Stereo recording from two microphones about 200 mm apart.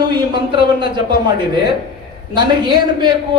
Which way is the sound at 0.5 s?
25° right (ahead or behind).